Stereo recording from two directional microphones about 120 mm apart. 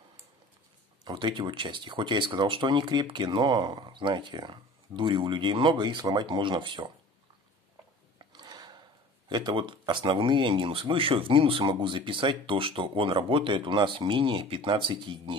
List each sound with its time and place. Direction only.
1.0 s speech: 40° right (ahead or behind)
8.3 s a sound: 40° right (ahead or behind)
9.3 s speech: 35° right (ahead or behind)